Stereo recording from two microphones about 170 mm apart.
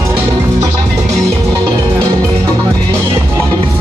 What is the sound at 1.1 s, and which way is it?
Music, 20° right (ahead or behind).